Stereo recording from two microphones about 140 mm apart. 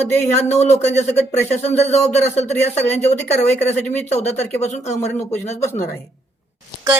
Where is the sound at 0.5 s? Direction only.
55° left (ahead or behind).